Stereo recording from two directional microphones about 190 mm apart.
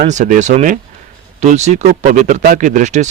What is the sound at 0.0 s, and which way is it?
A man's voice, 40° right (ahead or behind).